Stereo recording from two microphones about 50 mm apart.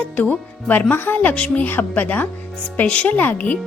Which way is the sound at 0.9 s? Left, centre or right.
Left.